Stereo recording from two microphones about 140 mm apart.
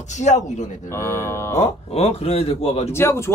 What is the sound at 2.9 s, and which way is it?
Speech, 20° left (ahead or behind).